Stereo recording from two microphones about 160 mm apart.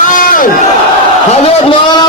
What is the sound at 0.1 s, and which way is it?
Crowd, 60° left (ahead or behind).